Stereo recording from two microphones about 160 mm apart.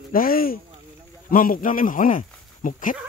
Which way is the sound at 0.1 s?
65° left (ahead or behind).